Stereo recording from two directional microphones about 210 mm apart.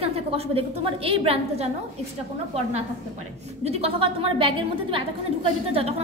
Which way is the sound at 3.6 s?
30° right (ahead or behind).